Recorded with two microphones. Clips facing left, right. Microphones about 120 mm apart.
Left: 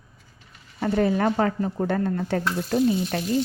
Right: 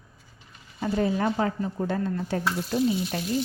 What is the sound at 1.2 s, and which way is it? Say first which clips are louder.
Speech: left 3 dB; 55° left (ahead or behind).